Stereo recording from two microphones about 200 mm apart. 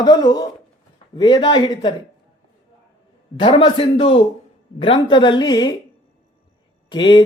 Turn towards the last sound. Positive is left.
turn(degrees=25)  # may be behind; listen again after turning